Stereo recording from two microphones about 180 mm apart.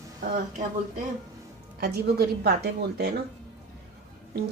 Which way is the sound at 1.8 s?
60° right (ahead or behind).